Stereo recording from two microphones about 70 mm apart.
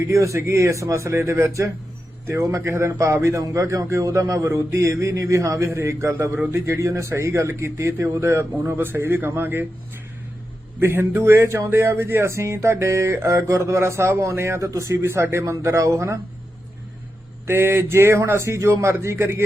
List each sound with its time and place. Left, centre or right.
0.1 s speech: right
10.8 s speech: right
17.4 s speech: right